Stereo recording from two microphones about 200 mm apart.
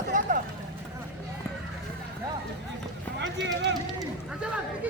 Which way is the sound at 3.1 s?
60° right (ahead or behind).